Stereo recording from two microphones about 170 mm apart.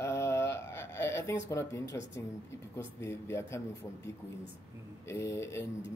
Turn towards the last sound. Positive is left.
turn(degrees=15)  # may be behind; listen again after turning